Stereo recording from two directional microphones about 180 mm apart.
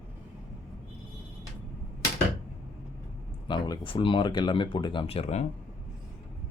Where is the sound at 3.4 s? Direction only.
25° left (ahead or behind).